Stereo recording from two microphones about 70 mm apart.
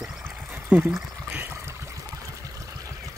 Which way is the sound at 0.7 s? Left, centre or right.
Centre.